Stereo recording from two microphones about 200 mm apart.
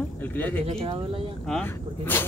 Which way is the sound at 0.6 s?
30° right (ahead or behind).